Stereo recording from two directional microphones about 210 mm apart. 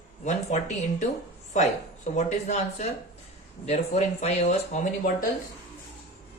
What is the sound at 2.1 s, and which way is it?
Speech, 35° left (ahead or behind).